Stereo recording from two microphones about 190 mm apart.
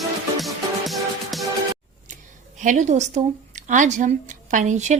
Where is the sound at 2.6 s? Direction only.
40° right (ahead or behind).